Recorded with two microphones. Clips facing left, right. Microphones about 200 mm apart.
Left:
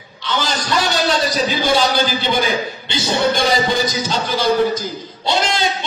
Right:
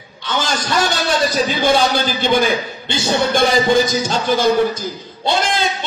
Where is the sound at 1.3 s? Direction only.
55° right (ahead or behind).